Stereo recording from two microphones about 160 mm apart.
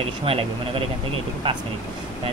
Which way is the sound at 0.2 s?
35° right (ahead or behind).